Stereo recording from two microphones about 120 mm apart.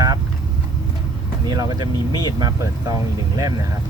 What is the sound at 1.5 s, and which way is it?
Speech, 35° right (ahead or behind).